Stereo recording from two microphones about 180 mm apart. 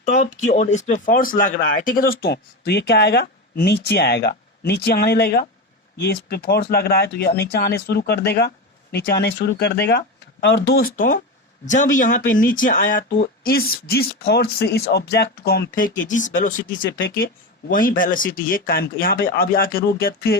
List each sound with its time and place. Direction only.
0.0 s speech: 40° left (ahead or behind)